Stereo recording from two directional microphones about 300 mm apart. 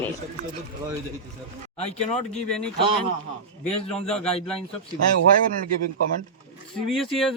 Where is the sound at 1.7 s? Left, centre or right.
Left.